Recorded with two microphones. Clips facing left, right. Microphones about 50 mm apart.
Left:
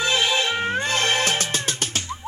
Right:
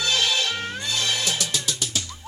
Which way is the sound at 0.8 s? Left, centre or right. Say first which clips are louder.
Left 5 dB; left.